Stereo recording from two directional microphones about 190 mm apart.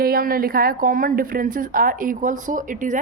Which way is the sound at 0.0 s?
50° right (ahead or behind).